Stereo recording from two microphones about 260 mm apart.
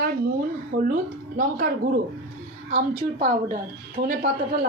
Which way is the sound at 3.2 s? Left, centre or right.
Right.